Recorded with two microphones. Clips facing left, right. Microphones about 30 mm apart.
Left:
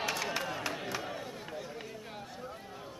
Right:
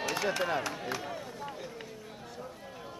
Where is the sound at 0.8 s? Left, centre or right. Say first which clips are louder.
Right 1 dB; centre.